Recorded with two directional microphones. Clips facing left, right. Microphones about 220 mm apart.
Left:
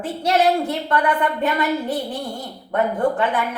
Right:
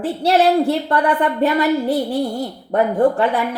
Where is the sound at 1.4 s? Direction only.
40° right (ahead or behind).